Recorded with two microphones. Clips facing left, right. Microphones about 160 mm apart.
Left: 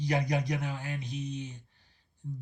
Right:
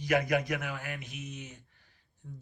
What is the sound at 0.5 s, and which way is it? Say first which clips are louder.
Speech: left 2 dB; 30° left (ahead or behind).